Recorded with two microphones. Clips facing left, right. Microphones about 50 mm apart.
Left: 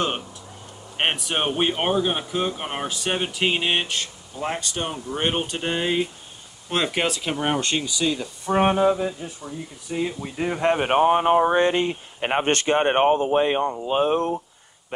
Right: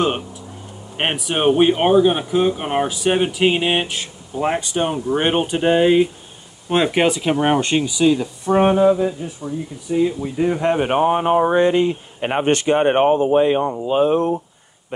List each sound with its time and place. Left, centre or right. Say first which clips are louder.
0.9 s speech: right 3 dB; centre
8.5 s speech: right 5 dB; centre
9.9 s speech: right 8 dB; centre
10.6 s speech: left 1 dB; left
11.5 s speech: right 4 dB; left
12.9 s speech: right 4 dB; left